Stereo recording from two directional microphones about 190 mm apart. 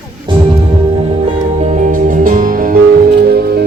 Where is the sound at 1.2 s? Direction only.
35° right (ahead or behind).